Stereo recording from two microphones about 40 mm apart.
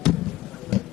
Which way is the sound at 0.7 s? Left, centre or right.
Centre.